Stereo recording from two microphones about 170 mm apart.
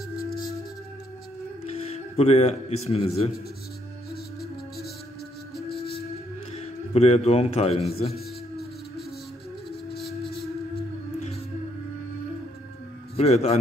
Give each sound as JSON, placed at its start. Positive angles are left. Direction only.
{"t": 1.7, "sound": "music", "side_deg": 35}
{"t": 2.9, "sound": "a man's voice", "side_deg": 35}
{"t": 4.1, "sound": "music", "side_deg": 65}
{"t": 6.5, "sound": "a man's voice", "side_deg": 40}
{"t": 13.1, "sound": "a man's voice", "side_deg": 40}